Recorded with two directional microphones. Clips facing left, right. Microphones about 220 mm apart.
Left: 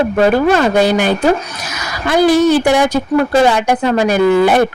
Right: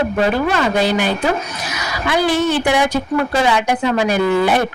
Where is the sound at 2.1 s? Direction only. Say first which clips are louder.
Left 6 dB; 40° left (ahead or behind).